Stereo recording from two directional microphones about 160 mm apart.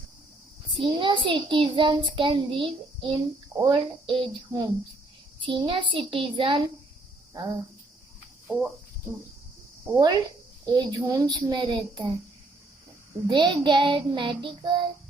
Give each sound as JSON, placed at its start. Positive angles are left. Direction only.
{"t": 0.8, "sound": "a child's voice", "side_deg": -30}
{"t": 8.4, "sound": "cricket", "side_deg": -5}
{"t": 9.9, "sound": "a child's voice", "side_deg": -25}
{"t": 13.2, "sound": "a child's voice", "side_deg": -30}